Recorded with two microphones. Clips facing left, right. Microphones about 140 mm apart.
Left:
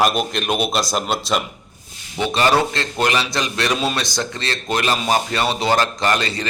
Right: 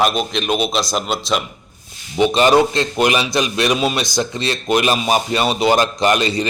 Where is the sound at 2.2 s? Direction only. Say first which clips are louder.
Right 5 dB; 20° right (ahead or behind).